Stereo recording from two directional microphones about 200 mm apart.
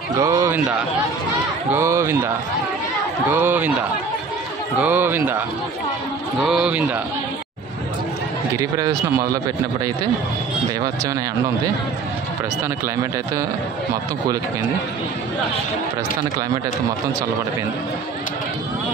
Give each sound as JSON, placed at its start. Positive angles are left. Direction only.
{"t": 0.2, "sound": "a man's voice", "side_deg": -15}
{"t": 3.3, "sound": "a man's voice", "side_deg": -10}
{"t": 4.7, "sound": "a man's voice", "side_deg": -10}
{"t": 6.4, "sound": "a man's voice", "side_deg": -5}
{"t": 8.5, "sound": "speech", "side_deg": -20}